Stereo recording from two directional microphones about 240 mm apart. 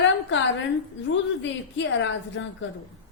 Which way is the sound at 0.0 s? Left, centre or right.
Left.